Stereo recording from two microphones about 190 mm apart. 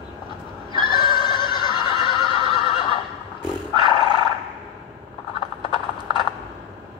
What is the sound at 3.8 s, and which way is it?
Roar, 25° left (ahead or behind).